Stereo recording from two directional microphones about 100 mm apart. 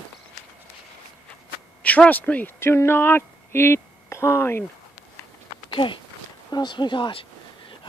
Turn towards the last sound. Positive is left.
turn(degrees=60)  # may be behind; listen again after turning